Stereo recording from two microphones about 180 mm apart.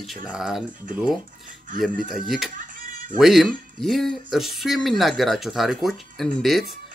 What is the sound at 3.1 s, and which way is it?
Speech, centre (ahead or behind).